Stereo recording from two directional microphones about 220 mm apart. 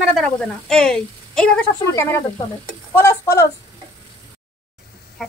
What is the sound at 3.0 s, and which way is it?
Speech, 15° left (ahead or behind).